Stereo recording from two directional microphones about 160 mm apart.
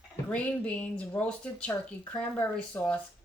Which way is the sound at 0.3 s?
10° left (ahead or behind).